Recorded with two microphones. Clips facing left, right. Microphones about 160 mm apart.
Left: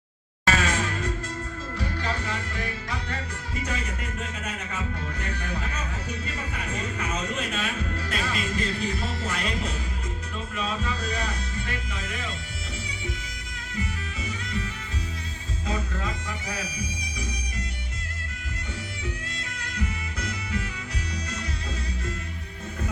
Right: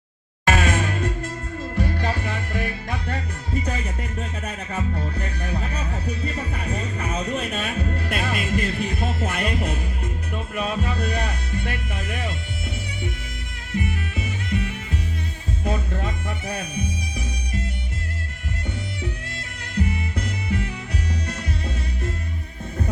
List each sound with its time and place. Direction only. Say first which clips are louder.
0.4 s music: right 4 dB; 55° right (ahead or behind)
4.2 s music: right 3 dB; 35° right (ahead or behind)
7.0 s music: right 4 dB; 35° right (ahead or behind)
8.1 s music: right 4 dB; 55° right (ahead or behind)
13.7 s music: right 7 dB; 60° right (ahead or behind)
19.7 s music: right 8 dB; 60° right (ahead or behind)